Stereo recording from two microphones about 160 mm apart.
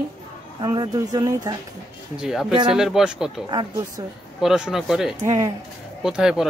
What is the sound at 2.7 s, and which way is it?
Speech, 5° right (ahead or behind).